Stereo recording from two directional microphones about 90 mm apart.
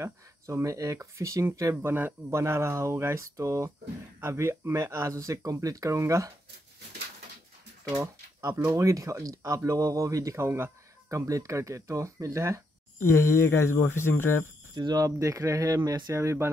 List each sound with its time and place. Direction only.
0.0 s speech: 35° right (ahead or behind)
7.9 s speech: 40° right (ahead or behind)
13.0 s speech: 30° left (ahead or behind)
14.8 s speech: 50° right (ahead or behind)
15.1 s speech: 35° right (ahead or behind)